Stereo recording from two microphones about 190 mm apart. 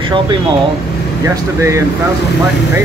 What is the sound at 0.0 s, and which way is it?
Speech, 25° right (ahead or behind).